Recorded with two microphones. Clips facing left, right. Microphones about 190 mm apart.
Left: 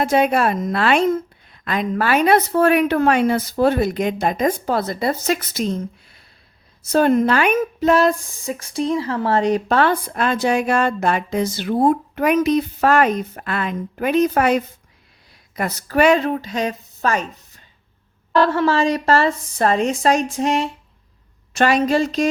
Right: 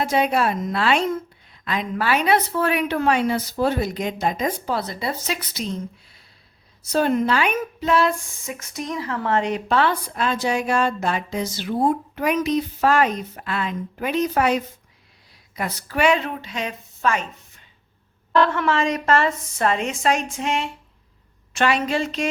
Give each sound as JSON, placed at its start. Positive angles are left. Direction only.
{"t": 0.0, "sound": "speech", "side_deg": 50}
{"t": 6.8, "sound": "a woman's voice", "side_deg": 50}